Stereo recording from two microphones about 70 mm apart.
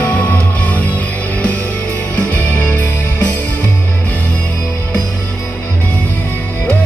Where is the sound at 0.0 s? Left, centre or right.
Left.